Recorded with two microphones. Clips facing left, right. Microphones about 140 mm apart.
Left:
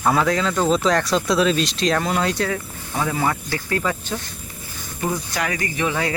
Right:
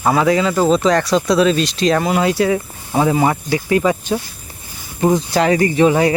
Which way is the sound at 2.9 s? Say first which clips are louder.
Right 7 dB; 20° right (ahead or behind).